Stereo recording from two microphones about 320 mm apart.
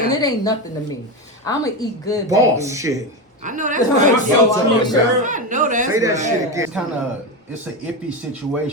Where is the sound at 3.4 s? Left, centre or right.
Right.